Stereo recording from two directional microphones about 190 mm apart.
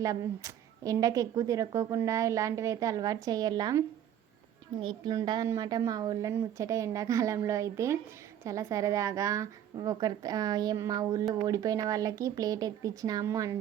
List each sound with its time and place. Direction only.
0.0 s a woman's voice: 15° right (ahead or behind)